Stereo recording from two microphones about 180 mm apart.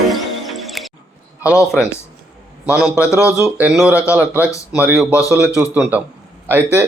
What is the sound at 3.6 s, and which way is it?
Speech, 5° right (ahead or behind).